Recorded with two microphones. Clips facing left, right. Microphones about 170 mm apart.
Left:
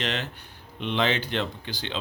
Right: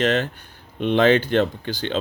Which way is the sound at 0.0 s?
50° right (ahead or behind).